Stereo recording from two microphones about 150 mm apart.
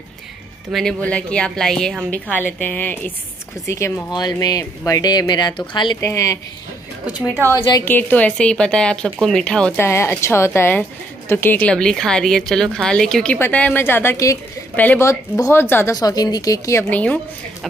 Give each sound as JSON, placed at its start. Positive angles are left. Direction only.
{"t": 0.7, "sound": "a woman's voice", "side_deg": 0}
{"t": 5.9, "sound": "a woman's voice", "side_deg": 20}
{"t": 7.1, "sound": "speech", "side_deg": -10}
{"t": 7.8, "sound": "speech", "side_deg": 10}
{"t": 9.8, "sound": "a woman's voice", "side_deg": 15}
{"t": 16.9, "sound": "speech", "side_deg": 10}